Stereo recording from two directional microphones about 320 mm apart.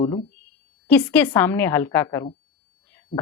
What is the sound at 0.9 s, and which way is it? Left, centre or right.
Speech, centre.